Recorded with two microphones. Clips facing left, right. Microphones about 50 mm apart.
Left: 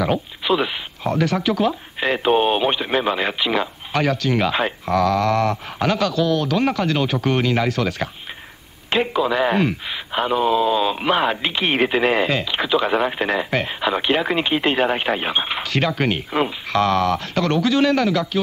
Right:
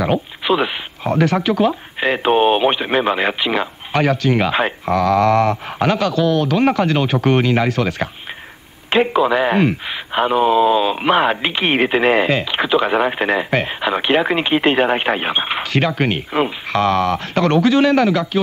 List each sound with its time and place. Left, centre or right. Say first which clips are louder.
0.0 s speech: right 3 dB; right